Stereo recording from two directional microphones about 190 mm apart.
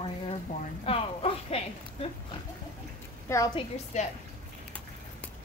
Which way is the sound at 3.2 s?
15° left (ahead or behind).